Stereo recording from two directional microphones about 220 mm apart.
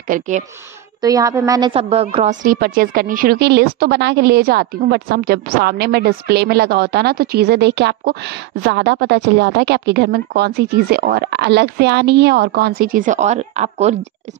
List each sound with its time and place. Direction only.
0.1 s speech: 35° right (ahead or behind)
1.0 s a woman's voice: 15° right (ahead or behind)